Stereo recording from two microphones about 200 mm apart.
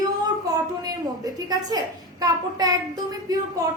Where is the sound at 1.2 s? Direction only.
20° right (ahead or behind).